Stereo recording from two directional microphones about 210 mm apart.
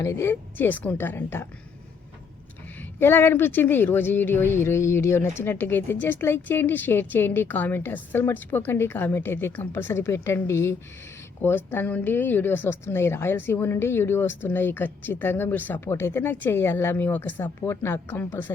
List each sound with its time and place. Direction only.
0.0 s speech: 15° left (ahead or behind)
3.0 s speech: 10° left (ahead or behind)